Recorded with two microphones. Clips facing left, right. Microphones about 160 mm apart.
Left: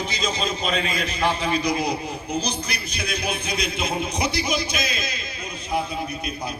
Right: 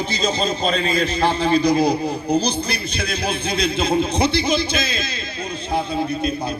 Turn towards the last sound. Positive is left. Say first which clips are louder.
# right 4 dB
turn(degrees=-30)  # may be behind; listen again after turning